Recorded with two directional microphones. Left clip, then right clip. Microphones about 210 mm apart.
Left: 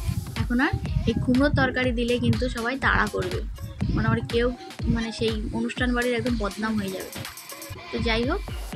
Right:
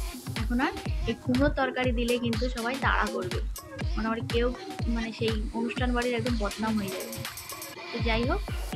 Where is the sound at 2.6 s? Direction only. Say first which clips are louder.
Left 4 dB; 20° left (ahead or behind).